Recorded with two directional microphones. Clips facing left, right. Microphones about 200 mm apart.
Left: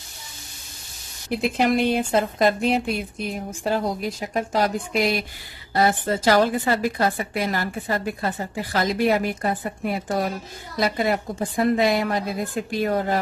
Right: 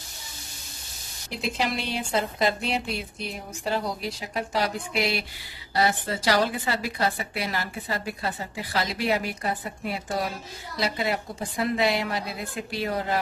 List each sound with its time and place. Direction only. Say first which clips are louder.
1.3 s a woman's voice: left 8 dB; 55° left (ahead or behind)